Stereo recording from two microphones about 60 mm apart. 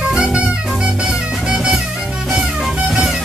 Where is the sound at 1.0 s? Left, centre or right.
Centre.